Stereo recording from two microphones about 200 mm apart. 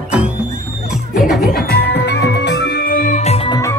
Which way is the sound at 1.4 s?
50° left (ahead or behind).